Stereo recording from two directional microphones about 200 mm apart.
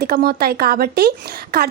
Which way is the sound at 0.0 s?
50° right (ahead or behind).